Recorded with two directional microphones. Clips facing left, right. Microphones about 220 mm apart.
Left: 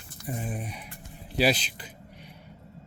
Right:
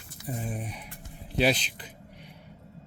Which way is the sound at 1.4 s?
5° left (ahead or behind).